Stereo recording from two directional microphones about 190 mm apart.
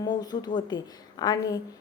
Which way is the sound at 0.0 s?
20° left (ahead or behind).